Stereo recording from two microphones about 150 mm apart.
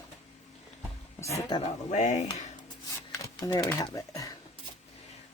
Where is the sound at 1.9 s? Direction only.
50° left (ahead or behind).